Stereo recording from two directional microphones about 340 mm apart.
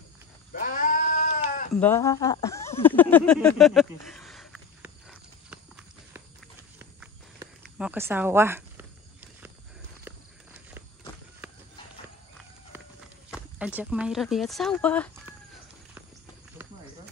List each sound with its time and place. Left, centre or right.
0.5 s sheep: left
1.7 s speech: centre
5.5 s clip-clop: centre
6.8 s a sound: centre
10.0 s walk: centre
13.6 s speech: centre